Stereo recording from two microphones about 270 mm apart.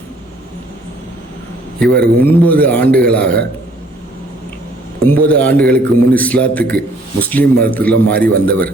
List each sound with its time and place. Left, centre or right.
1.8 s a man's voice: centre
5.0 s a man's voice: centre